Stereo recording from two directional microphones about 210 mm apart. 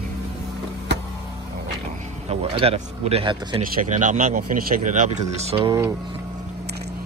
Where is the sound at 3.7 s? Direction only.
40° right (ahead or behind); by 6.2 s 20° right (ahead or behind).